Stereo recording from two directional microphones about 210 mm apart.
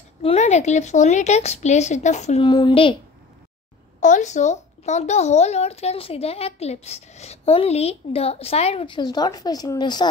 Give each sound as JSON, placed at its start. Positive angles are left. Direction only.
{"t": 0.2, "sound": "speech", "side_deg": 30}
{"t": 4.0, "sound": "speech", "side_deg": 35}